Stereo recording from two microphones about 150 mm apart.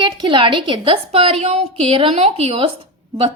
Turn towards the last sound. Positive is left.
turn(degrees=-40)  # may be behind; listen again after turning